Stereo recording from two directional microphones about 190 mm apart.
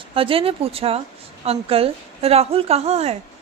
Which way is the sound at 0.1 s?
30° right (ahead or behind).